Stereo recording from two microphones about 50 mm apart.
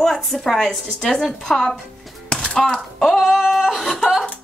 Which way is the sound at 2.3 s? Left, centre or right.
Centre.